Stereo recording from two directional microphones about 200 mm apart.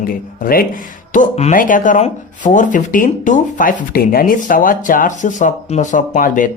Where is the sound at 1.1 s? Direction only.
35° left (ahead or behind).